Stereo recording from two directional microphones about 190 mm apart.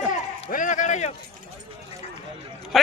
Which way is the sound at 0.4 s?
40° left (ahead or behind).